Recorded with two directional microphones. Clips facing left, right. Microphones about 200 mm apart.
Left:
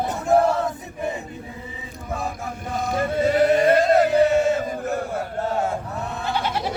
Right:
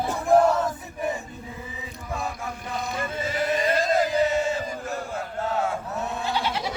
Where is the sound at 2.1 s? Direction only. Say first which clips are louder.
Left 3 dB; 45° left (ahead or behind).